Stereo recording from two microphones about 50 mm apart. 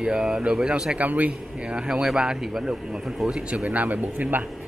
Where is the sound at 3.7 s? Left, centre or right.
Right.